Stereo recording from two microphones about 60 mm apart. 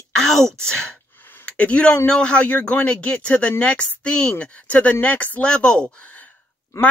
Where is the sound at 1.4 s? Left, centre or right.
Left.